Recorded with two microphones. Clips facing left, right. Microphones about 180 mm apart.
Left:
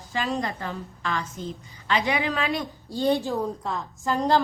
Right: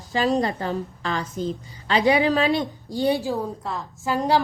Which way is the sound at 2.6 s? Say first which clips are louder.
Right 3 dB; 15° right (ahead or behind).